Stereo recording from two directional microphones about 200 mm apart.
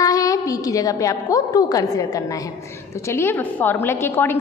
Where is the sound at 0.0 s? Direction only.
15° left (ahead or behind).